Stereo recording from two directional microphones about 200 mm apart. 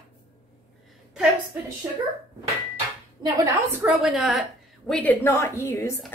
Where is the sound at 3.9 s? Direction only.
Centre (ahead or behind).